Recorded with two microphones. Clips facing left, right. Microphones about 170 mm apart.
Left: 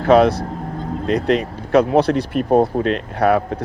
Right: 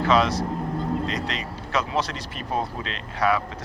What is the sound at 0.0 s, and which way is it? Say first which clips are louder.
Speech: left 8 dB; 55° left (ahead or behind).